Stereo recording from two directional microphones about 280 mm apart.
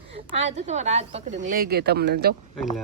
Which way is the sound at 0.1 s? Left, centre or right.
Right.